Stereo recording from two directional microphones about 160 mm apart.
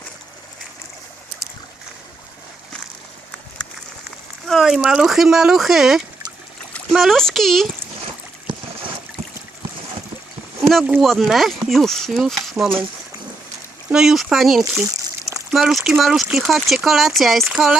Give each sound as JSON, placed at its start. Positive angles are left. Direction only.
{"t": 4.4, "sound": "speech", "side_deg": 0}
{"t": 10.6, "sound": "a sound", "side_deg": 0}
{"t": 11.0, "sound": "speech", "side_deg": 0}
{"t": 13.9, "sound": "speech", "side_deg": 0}
{"t": 14.6, "sound": "a sound", "side_deg": -20}
{"t": 15.4, "sound": "speech", "side_deg": 0}